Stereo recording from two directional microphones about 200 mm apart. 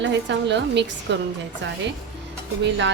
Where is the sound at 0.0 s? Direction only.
60° right (ahead or behind).